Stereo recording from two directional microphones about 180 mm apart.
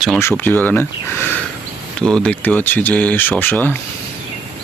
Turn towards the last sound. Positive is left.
turn(degrees=10)  # may be behind; listen again after turning